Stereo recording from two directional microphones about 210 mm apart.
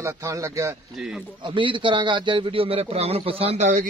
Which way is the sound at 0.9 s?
Centre (ahead or behind).